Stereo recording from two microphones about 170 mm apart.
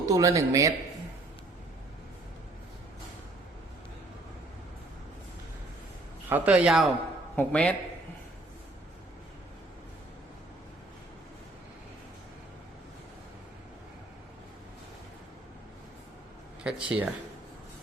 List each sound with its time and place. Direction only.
0.1 s speech: 20° right (ahead or behind)
6.2 s a man's voice: 10° right (ahead or behind)
7.3 s a man's voice: 10° left (ahead or behind)
16.6 s a man's voice: 5° right (ahead or behind)